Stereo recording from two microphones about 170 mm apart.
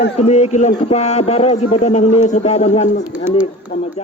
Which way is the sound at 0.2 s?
40° left (ahead or behind).